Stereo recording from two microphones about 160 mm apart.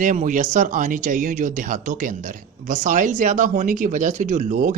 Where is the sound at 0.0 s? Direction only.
55° right (ahead or behind).